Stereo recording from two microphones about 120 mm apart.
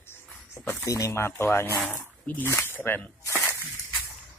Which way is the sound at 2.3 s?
15° left (ahead or behind).